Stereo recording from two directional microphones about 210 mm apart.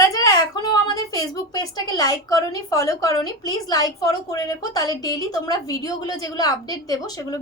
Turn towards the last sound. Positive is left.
turn(degrees=15)  # may be behind; listen again after turning